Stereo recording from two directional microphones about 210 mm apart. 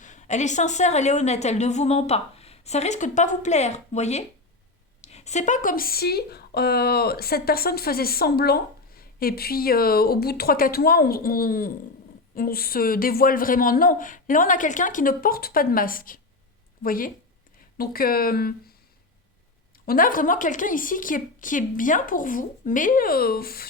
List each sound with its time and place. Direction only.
0.0 s a woman's voice: 35° left (ahead or behind)
19.8 s a woman's voice: 45° left (ahead or behind)